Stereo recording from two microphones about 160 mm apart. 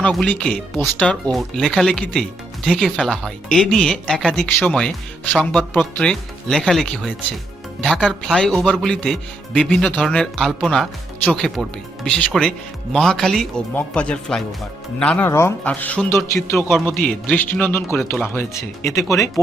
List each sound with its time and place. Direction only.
0.0 s speech: 5° left (ahead or behind)